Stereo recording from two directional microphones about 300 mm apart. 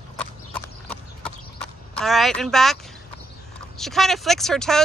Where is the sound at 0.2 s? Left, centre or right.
Centre.